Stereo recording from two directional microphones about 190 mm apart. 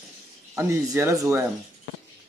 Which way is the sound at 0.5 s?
15° right (ahead or behind).